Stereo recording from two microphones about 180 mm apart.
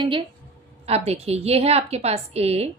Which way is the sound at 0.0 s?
30° right (ahead or behind).